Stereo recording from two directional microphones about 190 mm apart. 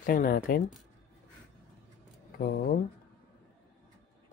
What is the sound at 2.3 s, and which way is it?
Speech, 55° left (ahead or behind).